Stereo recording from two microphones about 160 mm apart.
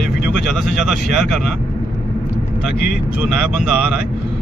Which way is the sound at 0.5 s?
Centre (ahead or behind).